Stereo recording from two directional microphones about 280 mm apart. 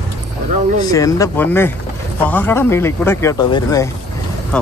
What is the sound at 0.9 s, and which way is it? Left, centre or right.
Speech, centre.